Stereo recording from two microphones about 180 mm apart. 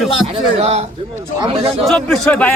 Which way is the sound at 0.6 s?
35° right (ahead or behind).